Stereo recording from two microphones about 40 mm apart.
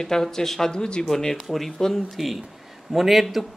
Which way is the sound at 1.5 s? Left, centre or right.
Centre.